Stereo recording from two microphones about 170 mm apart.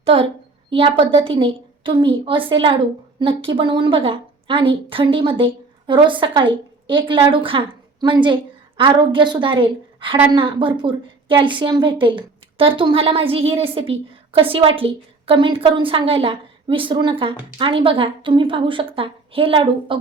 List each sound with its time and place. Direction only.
0.0 s a woman's voice: 35° right (ahead or behind)